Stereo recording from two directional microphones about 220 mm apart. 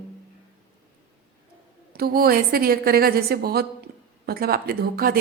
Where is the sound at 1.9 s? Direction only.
45° right (ahead or behind).